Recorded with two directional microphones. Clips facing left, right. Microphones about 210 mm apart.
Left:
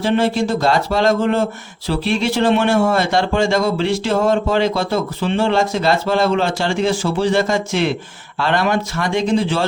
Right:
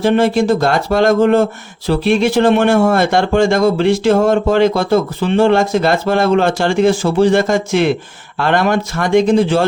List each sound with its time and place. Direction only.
0.0 s speech: 50° right (ahead or behind)